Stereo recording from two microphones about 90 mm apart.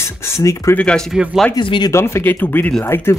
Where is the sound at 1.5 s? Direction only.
60° left (ahead or behind).